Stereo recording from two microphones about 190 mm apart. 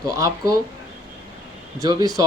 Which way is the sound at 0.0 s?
15° right (ahead or behind).